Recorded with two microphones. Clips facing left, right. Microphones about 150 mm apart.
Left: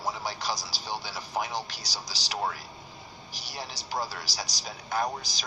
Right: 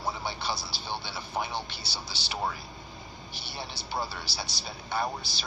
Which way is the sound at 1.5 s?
40° left (ahead or behind).